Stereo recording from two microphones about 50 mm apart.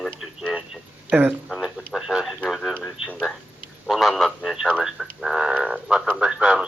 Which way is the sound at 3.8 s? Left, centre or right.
Centre.